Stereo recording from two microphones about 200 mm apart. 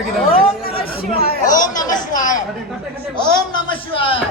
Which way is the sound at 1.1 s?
50° left (ahead or behind).